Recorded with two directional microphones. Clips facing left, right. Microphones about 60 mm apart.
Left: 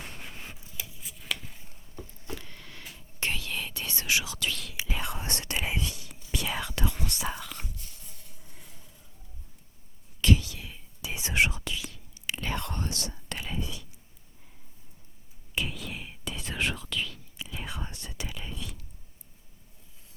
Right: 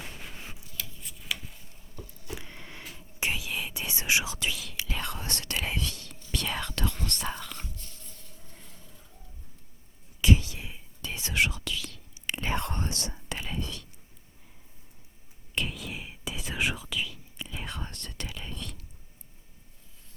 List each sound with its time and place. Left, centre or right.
0.9 s a sound: centre
2.0 s a sound: left
2.3 s whispering: centre
4.5 s whispering: centre
4.8 s whispering: centre
10.3 s whispering: right
11.0 s whispering: centre
12.4 s whispering: right
13.2 s whispering: centre
13.6 s whispering: centre
15.5 s whispering: centre